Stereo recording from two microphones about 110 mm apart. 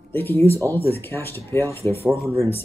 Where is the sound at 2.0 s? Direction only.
Centre (ahead or behind).